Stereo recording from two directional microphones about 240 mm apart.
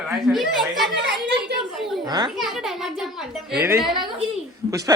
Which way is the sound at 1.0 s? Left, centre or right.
Right.